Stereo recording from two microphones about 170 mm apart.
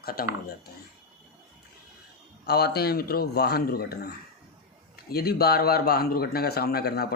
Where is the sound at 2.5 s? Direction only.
70° left (ahead or behind).